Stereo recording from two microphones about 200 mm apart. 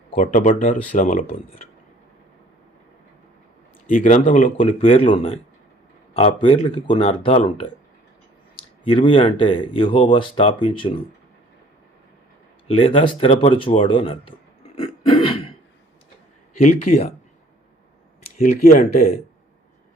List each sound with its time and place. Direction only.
0.2 s speech: 40° left (ahead or behind)
3.8 s speech: 40° left (ahead or behind)
8.8 s speech: 25° left (ahead or behind)
12.6 s speech: 30° left (ahead or behind)
14.8 s throat clearing: 25° left (ahead or behind)
16.6 s speech: 40° left (ahead or behind)
18.5 s speech: 45° left (ahead or behind)